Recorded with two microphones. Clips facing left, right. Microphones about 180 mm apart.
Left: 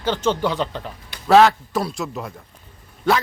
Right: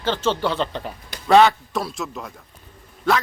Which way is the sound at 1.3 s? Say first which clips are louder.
Left 1 dB; centre (ahead or behind).